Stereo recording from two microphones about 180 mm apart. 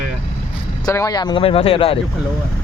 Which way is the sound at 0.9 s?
20° left (ahead or behind).